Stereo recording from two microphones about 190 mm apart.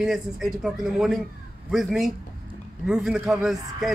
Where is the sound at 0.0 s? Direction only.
Centre (ahead or behind).